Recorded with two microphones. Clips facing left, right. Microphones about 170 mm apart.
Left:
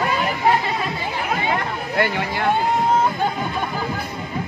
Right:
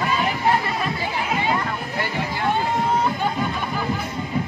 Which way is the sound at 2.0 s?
70° left (ahead or behind).